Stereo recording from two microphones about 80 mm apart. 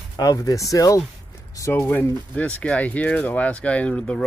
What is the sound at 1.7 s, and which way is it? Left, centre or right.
Speech, left.